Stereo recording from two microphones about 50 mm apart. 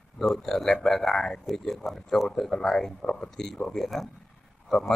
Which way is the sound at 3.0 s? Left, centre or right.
Centre.